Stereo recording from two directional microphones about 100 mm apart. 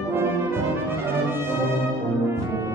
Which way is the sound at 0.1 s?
20° right (ahead or behind).